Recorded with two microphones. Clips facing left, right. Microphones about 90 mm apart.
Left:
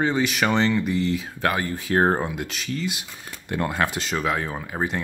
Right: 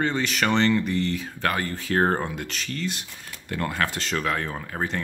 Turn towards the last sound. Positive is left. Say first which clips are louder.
# left 2 dB
turn(degrees=10)  # may be behind; listen again after turning